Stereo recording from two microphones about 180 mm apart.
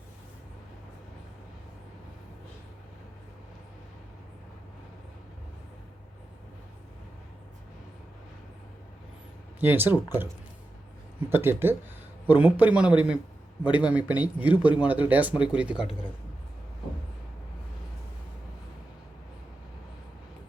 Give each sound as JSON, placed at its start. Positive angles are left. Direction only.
{"t": 9.6, "sound": "speech", "side_deg": -10}
{"t": 11.3, "sound": "speech", "side_deg": -10}
{"t": 14.5, "sound": "speech", "side_deg": 25}
{"t": 14.8, "sound": "speech", "side_deg": -10}